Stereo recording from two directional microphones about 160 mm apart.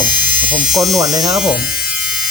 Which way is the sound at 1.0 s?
20° right (ahead or behind).